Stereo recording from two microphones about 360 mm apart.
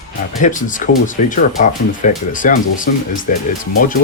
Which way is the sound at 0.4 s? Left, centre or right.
Left.